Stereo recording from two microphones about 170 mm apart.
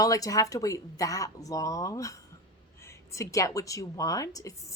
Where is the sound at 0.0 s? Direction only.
20° left (ahead or behind).